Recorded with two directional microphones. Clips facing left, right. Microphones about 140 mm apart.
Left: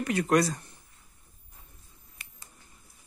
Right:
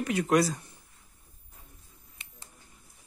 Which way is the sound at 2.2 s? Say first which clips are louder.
Left 2 dB; 25° right (ahead or behind).